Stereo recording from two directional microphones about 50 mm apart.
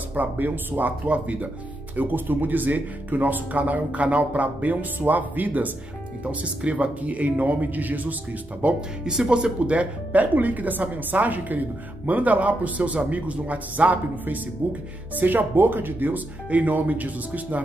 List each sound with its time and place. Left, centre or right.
0.1 s speech: right
2.0 s speech: right
9.0 s speech: centre
9.6 s a woman's voice: right
15.1 s speech: right